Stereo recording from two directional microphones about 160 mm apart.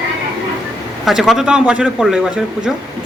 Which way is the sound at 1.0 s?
Centre (ahead or behind).